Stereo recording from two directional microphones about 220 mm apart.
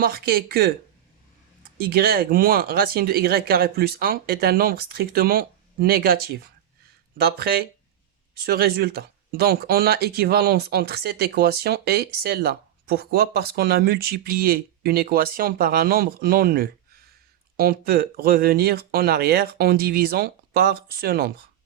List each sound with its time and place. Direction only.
0.0 s speech: 45° right (ahead or behind)
1.8 s speech: 45° right (ahead or behind)